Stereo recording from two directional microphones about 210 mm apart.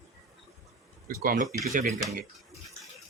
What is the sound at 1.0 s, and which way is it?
Speech, 45° right (ahead or behind).